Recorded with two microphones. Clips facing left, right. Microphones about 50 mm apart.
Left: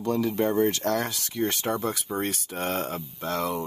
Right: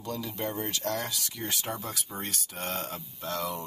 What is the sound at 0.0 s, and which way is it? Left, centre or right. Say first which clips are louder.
Speech: left 9 dB; left.